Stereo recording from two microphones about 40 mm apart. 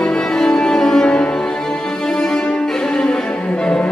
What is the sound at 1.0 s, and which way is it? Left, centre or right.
Cello, left.